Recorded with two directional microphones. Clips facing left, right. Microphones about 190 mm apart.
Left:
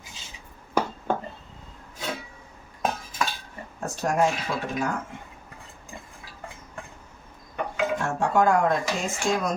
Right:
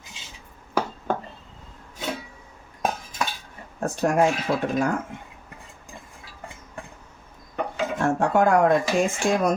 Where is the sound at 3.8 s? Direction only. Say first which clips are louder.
Right 3 dB; 55° right (ahead or behind).